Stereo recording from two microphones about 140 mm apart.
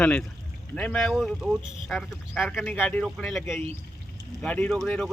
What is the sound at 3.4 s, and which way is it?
Speech, 20° left (ahead or behind).